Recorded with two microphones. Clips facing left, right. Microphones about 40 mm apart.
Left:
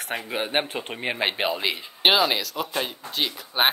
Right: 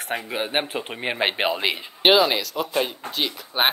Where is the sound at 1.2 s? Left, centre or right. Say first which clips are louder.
Right 3 dB; right.